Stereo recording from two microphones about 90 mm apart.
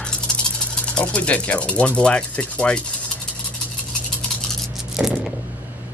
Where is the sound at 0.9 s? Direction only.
15° left (ahead or behind).